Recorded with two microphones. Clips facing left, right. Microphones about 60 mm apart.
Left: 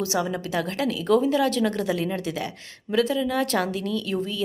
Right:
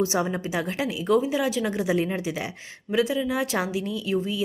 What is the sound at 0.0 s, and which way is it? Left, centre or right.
A woman's voice, right.